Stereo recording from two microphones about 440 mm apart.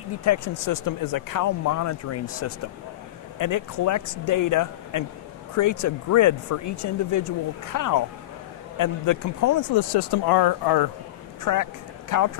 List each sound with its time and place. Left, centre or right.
0.2 s speech: left
3.3 s speech: left
9.8 s speech: left
11.5 s speech: left